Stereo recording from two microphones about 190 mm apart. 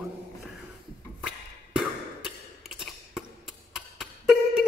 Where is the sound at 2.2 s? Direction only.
Centre (ahead or behind).